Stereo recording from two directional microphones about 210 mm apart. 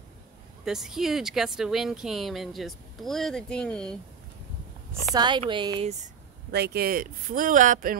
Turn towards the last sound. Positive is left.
turn(degrees=-40)  # may be behind; listen again after turning